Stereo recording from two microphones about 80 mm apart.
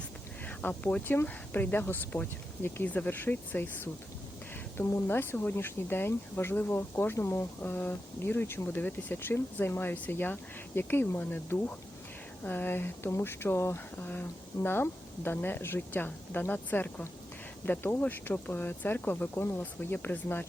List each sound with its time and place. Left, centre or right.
0.4 s speech: centre
4.9 s speech: left